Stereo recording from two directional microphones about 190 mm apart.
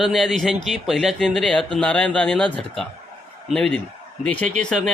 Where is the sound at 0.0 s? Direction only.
Centre (ahead or behind).